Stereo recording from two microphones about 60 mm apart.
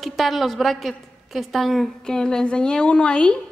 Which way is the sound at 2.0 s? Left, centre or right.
Centre.